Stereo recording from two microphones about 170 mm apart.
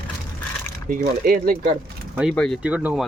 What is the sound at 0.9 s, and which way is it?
Speech, 60° right (ahead or behind).